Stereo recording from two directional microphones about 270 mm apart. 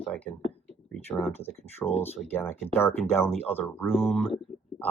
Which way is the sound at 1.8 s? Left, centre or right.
Centre.